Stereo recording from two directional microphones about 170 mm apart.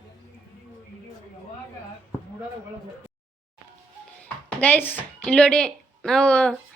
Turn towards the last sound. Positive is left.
turn(degrees=5)  # may be behind; listen again after turning